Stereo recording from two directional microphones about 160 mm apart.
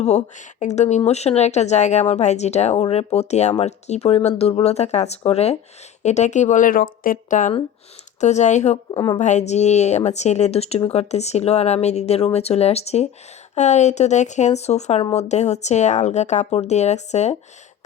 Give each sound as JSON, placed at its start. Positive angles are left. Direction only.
{"t": 0.0, "sound": "a woman's voice", "side_deg": 45}
{"t": 8.9, "sound": "a woman's voice", "side_deg": 25}
{"t": 9.1, "sound": "a woman's voice", "side_deg": 45}